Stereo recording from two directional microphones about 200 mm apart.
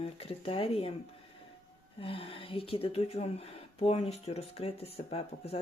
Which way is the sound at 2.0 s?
30° left (ahead or behind).